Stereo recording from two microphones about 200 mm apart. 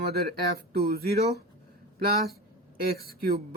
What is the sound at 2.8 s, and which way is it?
Speech, 50° right (ahead or behind).